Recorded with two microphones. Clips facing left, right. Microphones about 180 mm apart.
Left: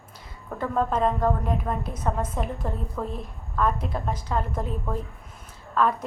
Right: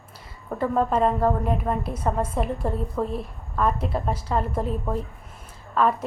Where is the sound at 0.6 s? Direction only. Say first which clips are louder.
Right 3 dB; 5° right (ahead or behind).